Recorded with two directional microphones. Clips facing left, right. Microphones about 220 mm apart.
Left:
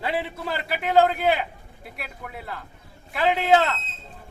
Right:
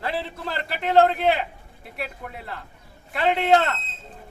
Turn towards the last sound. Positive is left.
turn(degrees=0)  # may be behind; listen again after turning